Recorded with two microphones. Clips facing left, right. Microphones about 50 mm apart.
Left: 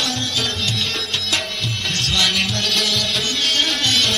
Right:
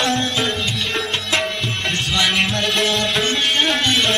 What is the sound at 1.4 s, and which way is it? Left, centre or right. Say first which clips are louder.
Music: right 3 dB; centre.